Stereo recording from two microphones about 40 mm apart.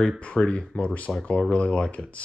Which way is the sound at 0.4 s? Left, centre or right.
Left.